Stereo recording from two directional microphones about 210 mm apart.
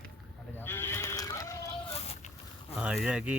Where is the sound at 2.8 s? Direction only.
5° right (ahead or behind).